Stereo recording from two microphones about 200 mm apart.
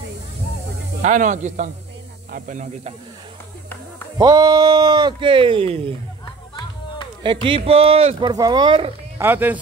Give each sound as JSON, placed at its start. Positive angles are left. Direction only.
{"t": 1.0, "sound": "speech", "side_deg": -40}
{"t": 4.2, "sound": "speech", "side_deg": -20}
{"t": 7.2, "sound": "speech", "side_deg": -25}
{"t": 9.2, "sound": "speech", "side_deg": -10}